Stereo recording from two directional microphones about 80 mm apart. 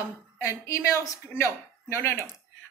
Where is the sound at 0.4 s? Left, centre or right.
Left.